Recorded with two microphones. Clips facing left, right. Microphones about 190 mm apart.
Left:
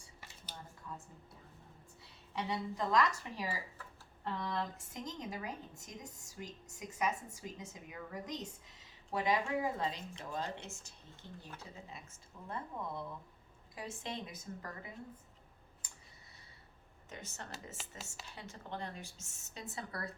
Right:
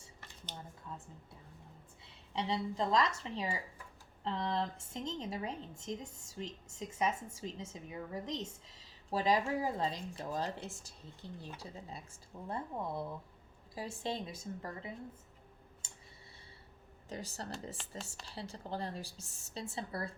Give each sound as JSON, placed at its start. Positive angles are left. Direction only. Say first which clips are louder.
{"t": 0.9, "sound": "a sound", "louder": "even", "side_deg": -20}
{"t": 2.3, "sound": "a woman's voice", "louder": "right 3 dB", "side_deg": -25}
{"t": 15.8, "sound": "tick-tock", "louder": "even", "side_deg": -25}
{"t": 17.1, "sound": "a woman's voice", "louder": "right 6 dB", "side_deg": -35}
{"t": 17.8, "sound": "speech", "louder": "even", "side_deg": 5}
{"t": 18.3, "sound": "a woman's voice", "louder": "right 4 dB", "side_deg": -35}